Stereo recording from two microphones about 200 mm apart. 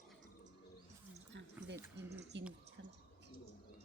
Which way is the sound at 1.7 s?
15° right (ahead or behind).